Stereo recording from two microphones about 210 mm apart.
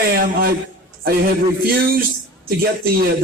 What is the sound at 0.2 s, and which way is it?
Speech, 45° right (ahead or behind).